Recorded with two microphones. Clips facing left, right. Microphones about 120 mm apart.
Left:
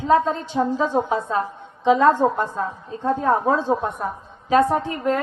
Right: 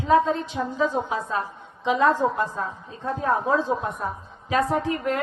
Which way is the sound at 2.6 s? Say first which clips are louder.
Left 5 dB; 40° left (ahead or behind).